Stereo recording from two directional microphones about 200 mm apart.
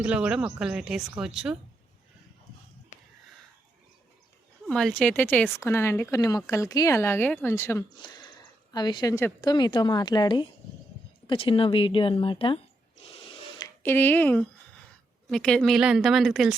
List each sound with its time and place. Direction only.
0.0 s a woman's voice: 5° right (ahead or behind)
4.6 s a woman's voice: 5° left (ahead or behind); by 12.5 s 25° left (ahead or behind)
13.0 s a sound: 25° left (ahead or behind)
13.8 s a woman's voice: 10° left (ahead or behind)